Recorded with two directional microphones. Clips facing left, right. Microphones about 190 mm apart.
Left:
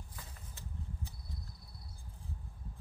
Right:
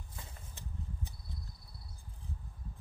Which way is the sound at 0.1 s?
25° right (ahead or behind).